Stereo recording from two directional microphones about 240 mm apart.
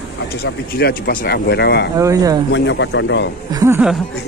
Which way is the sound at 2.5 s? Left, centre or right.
Left.